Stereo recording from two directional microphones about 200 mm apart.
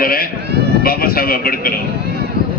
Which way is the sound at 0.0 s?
45° left (ahead or behind).